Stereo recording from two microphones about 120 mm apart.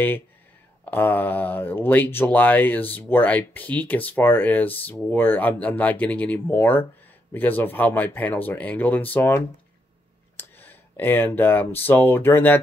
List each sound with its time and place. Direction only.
0.8 s speech: 15° left (ahead or behind)